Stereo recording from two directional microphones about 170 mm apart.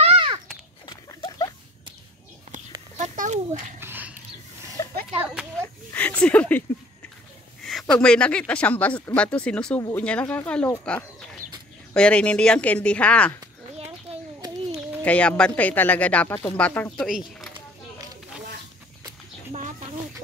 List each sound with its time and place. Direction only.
0.0 s a sound: 35° right (ahead or behind)
0.8 s rodents: 25° left (ahead or behind)
3.0 s a sound: 45° right (ahead or behind)
3.8 s dog: 10° right (ahead or behind)
4.8 s a sound: 20° left (ahead or behind)
5.2 s a child's voice: 5° right (ahead or behind)
5.9 s speech: 10° left (ahead or behind)
7.6 s speech: 5° left (ahead or behind)
15.0 s speech: 5° left (ahead or behind)